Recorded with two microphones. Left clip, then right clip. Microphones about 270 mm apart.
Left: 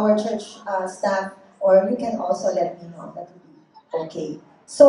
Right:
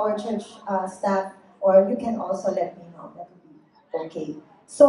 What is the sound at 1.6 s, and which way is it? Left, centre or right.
Speech, left.